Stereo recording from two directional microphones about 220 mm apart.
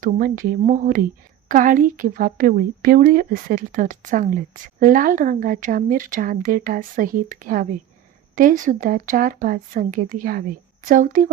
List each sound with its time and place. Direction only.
0.0 s a woman's voice: 40° right (ahead or behind)